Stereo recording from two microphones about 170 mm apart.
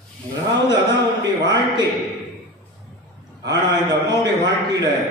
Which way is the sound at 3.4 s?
90° right.